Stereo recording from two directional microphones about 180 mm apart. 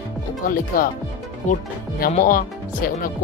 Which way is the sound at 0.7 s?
50° left (ahead or behind).